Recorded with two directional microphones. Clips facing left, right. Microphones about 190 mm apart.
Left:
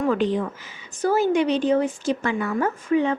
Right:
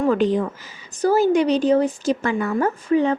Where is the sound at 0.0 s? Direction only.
40° right (ahead or behind).